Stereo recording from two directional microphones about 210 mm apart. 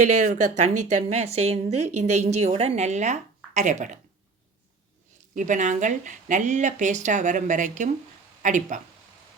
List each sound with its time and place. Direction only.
0.0 s a woman's voice: 35° right (ahead or behind)
5.3 s a woman's voice: 40° right (ahead or behind)